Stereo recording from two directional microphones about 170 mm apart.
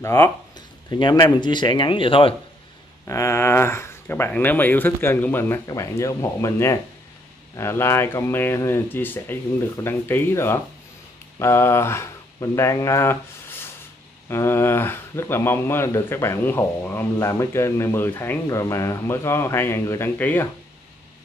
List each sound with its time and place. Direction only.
0.0 s speech: 15° left (ahead or behind)
0.6 s a sound: 25° left (ahead or behind)
1.4 s speech: 25° left (ahead or behind)
3.1 s speech: 15° left (ahead or behind)